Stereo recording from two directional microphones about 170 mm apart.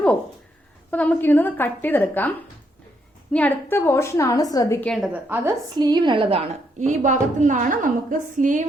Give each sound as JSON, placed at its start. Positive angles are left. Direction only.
{"t": 0.9, "sound": "a woman's voice", "side_deg": 10}
{"t": 3.3, "sound": "a woman's voice", "side_deg": 10}
{"t": 4.8, "sound": "a woman's voice", "side_deg": 0}
{"t": 5.1, "sound": "a woman's voice", "side_deg": -10}
{"t": 5.6, "sound": "a woman's voice", "side_deg": -25}
{"t": 6.7, "sound": "a woman's voice", "side_deg": -45}